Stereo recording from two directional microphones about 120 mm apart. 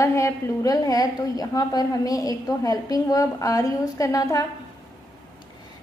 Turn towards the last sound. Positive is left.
turn(degrees=30)  # may be behind; listen again after turning